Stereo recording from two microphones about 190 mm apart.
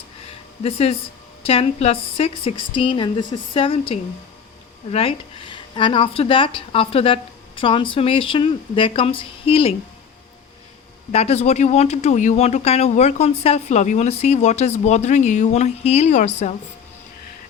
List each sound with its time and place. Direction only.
0.3 s a sound: 30° left (ahead or behind)
1.5 s speech: 30° left (ahead or behind)
11.1 s speech: 35° left (ahead or behind)